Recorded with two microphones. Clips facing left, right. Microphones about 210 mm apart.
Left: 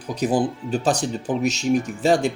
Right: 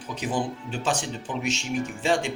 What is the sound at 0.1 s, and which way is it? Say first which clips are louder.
Speech: left 7 dB; 35° left (ahead or behind).